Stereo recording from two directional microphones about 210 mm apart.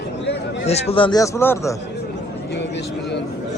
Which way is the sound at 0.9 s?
20° left (ahead or behind).